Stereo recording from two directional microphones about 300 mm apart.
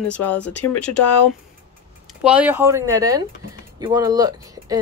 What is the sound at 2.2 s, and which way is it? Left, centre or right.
Speech, centre.